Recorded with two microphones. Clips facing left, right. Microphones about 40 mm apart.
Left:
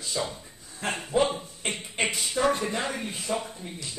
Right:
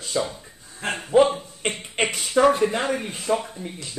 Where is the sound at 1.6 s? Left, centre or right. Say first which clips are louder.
Right 5 dB; right.